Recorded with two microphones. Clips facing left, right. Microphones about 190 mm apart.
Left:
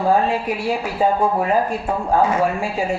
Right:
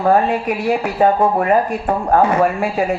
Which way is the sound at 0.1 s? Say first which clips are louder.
Right 4 dB; 60° right (ahead or behind).